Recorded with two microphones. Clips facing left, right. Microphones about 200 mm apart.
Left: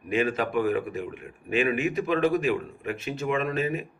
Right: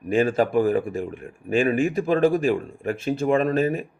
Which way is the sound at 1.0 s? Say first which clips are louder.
Right 4 dB; 45° right (ahead or behind).